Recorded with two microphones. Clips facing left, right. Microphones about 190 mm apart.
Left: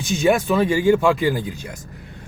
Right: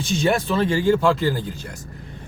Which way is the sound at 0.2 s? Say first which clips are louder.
Left 4 dB; 10° left (ahead or behind).